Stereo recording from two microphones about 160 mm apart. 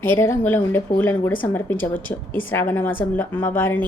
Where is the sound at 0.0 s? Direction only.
15° left (ahead or behind).